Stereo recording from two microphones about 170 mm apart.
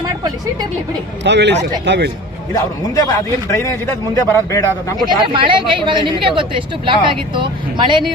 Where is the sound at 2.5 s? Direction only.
20° left (ahead or behind).